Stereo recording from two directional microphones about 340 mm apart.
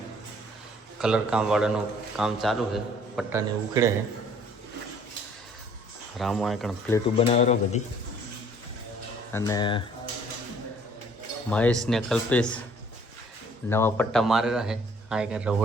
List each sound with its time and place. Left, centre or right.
0.9 s a man's voice: centre
6.1 s a man's voice: centre
7.2 s speech: centre
9.3 s speech: centre
11.5 s a man's voice: centre
13.7 s a man's voice: centre